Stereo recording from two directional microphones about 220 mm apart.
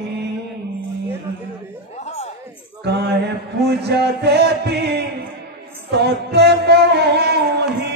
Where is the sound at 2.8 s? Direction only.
50° right (ahead or behind).